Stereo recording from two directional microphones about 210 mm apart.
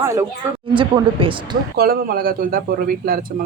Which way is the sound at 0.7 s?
25° right (ahead or behind).